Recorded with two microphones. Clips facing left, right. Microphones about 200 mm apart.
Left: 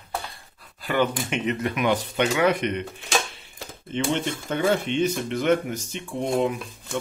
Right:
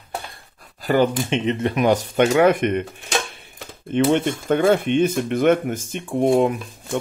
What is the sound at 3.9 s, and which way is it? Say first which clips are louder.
Speech: right 7 dB; 55° right (ahead or behind).